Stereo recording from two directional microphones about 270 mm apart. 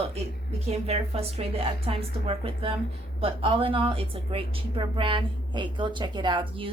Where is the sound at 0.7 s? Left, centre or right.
Right.